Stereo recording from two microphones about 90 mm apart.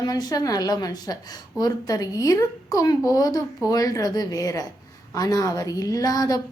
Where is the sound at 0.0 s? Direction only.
50° left (ahead or behind).